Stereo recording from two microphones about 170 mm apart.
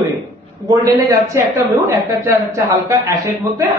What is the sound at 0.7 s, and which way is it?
A man's voice, 20° right (ahead or behind).